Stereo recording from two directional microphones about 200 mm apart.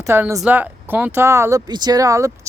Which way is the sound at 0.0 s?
15° right (ahead or behind).